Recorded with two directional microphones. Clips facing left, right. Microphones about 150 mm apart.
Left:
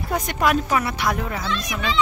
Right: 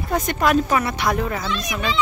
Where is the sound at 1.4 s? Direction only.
15° right (ahead or behind).